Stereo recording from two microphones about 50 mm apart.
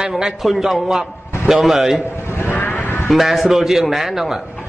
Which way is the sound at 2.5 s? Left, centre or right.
Left.